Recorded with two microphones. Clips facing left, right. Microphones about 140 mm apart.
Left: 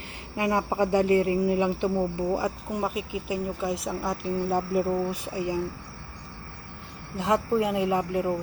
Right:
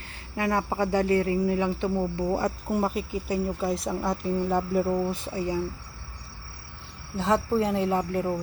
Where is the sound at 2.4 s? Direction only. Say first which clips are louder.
Right 2 dB; centre (ahead or behind).